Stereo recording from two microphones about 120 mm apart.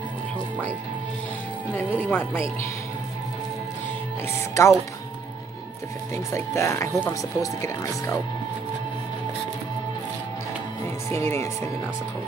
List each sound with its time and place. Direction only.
1.7 s speech: 15° left (ahead or behind)
4.3 s speech: 25° left (ahead or behind)
6.1 s speech: 25° left (ahead or behind)
11.1 s speech: 20° left (ahead or behind)